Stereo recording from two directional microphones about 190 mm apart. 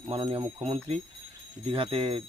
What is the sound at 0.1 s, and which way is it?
Speech, 30° right (ahead or behind).